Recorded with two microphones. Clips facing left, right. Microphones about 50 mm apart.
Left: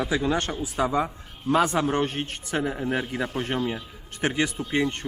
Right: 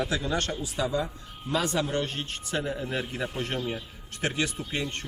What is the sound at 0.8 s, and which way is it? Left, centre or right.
A man's voice, left.